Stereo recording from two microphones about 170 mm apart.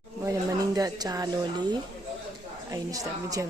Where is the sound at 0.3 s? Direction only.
20° right (ahead or behind).